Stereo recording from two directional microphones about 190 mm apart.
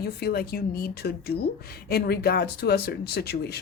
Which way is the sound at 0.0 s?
55° left (ahead or behind).